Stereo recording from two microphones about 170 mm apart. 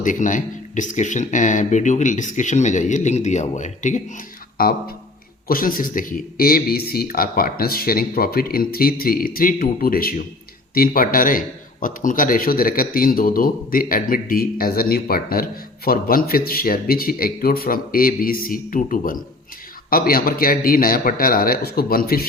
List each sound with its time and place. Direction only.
0.0 s speech: 50° left (ahead or behind)
4.6 s a man's voice: 60° left (ahead or behind)